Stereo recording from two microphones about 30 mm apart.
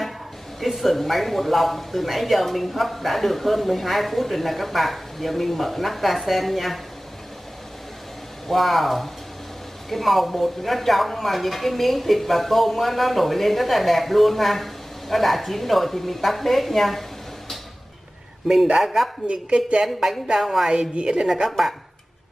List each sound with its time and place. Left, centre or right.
0.6 s speech: centre
8.5 s speech: centre
18.8 s speech: centre
19.2 s a woman's voice: right
20.3 s a woman's voice: right
21.5 s speech: centre